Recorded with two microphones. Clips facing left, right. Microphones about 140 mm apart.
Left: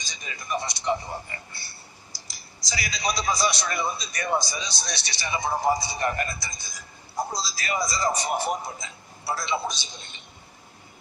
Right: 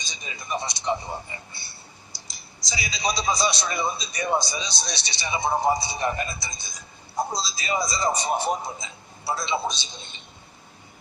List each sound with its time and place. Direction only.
0.0 s a man's voice: 20° right (ahead or behind)
2.6 s a man's voice: 20° right (ahead or behind)